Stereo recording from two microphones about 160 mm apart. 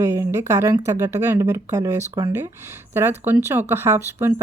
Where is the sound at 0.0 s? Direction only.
15° right (ahead or behind).